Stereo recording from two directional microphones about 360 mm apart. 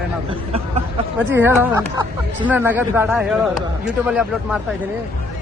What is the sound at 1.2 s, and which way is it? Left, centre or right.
Speech, centre.